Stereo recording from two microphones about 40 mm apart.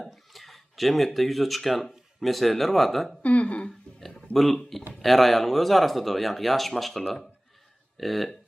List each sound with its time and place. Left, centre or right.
0.0 s speech: centre
3.2 s speech: left
4.3 s speech: centre